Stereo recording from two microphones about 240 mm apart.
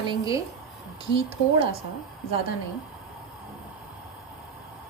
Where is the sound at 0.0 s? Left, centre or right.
Centre.